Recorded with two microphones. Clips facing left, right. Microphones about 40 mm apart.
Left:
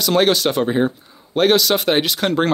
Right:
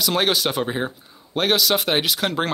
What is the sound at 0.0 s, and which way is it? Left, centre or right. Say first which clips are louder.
A man's voice: left 5 dB; centre.